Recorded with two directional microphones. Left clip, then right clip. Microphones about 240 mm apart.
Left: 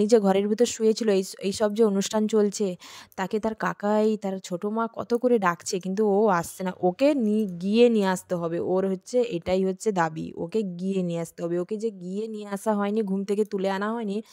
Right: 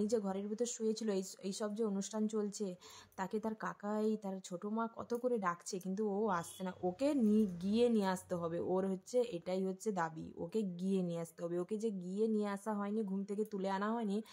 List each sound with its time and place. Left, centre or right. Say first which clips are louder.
0.0 s speech: left 17 dB; left